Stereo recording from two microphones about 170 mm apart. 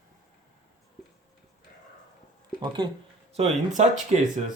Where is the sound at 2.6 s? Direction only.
30° right (ahead or behind).